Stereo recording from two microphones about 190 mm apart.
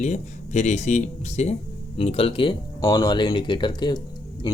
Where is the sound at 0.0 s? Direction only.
35° left (ahead or behind).